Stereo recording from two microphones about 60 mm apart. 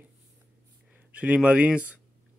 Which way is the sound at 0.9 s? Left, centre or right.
Right.